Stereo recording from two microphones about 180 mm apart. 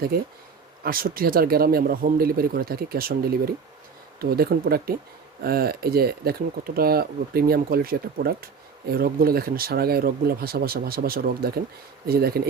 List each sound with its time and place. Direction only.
0.9 s speech: 55° right (ahead or behind)